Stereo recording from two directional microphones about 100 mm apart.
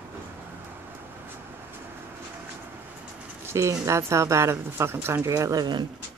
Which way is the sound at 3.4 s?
30° right (ahead or behind).